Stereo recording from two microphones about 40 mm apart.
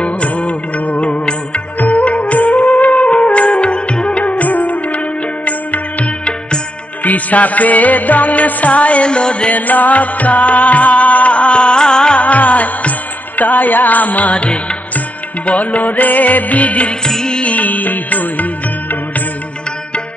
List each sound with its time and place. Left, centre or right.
0.0 s music: left
4.2 s music: left
9.5 s music: left; by 12.2 s centre
12.2 s music: left
17.0 s music: centre
17.4 s music: left